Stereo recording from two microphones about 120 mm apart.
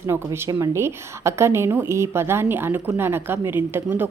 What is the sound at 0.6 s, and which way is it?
A woman's voice, 25° right (ahead or behind).